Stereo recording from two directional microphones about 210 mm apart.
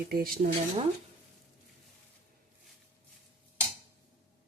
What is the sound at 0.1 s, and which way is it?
Speech, 45° right (ahead or behind).